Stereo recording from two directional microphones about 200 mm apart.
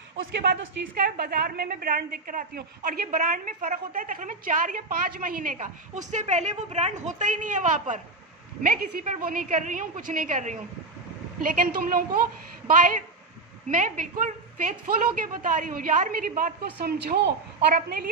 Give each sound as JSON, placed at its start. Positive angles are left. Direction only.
{"t": 0.2, "sound": "a woman's voice", "side_deg": -50}